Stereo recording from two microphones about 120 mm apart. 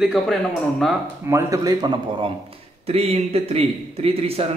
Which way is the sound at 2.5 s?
55° right (ahead or behind).